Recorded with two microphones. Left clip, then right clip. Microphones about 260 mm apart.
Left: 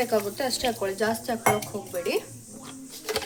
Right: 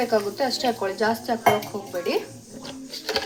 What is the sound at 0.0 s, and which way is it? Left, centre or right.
Speech, left.